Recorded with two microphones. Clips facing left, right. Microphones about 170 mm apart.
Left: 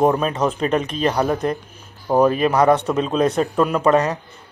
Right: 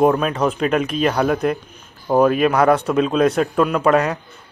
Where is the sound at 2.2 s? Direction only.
30° left (ahead or behind).